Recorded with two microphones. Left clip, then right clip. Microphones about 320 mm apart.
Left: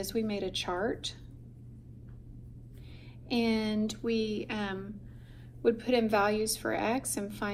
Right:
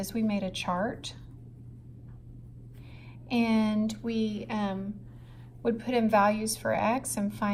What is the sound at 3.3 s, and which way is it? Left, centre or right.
A woman's voice, right.